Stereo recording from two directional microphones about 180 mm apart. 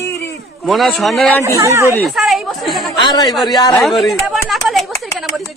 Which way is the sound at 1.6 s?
15° right (ahead or behind).